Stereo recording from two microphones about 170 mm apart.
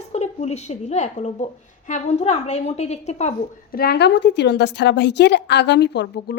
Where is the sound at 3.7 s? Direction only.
65° left (ahead or behind).